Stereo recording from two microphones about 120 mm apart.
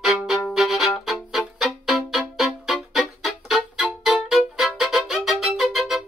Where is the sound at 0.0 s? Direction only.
Centre (ahead or behind).